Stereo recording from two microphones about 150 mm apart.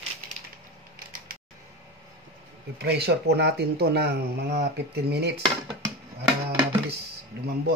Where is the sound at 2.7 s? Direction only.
90° right.